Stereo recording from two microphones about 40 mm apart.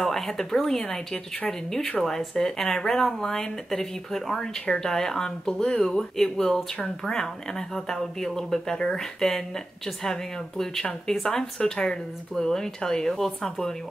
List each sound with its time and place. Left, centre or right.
0.0 s speech: centre
10.6 s speech: centre